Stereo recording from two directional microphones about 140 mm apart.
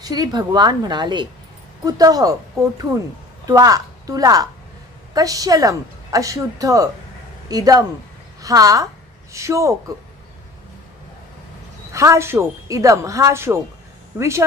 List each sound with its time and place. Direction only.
0.0 s a woman's voice: 30° right (ahead or behind)
3.4 s a woman's voice: 25° right (ahead or behind)
11.9 s speech: 20° right (ahead or behind)